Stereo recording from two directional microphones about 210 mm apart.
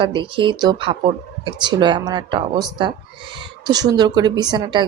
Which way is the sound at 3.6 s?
20° right (ahead or behind).